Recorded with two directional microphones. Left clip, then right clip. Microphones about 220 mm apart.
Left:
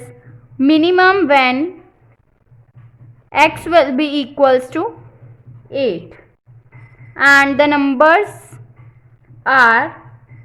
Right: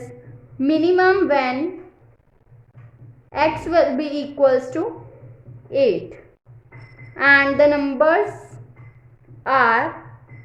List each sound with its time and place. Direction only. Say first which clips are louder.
0.6 s a woman's voice: left 5 dB; 35° left (ahead or behind)
3.3 s a woman's voice: left 6 dB; 35° left (ahead or behind)
5.6 s a woman's voice: right 1 dB; 25° left (ahead or behind)
9.4 s a woman's voice: left 6 dB; 25° left (ahead or behind)